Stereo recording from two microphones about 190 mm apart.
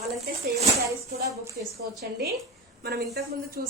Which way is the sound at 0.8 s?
15° right (ahead or behind).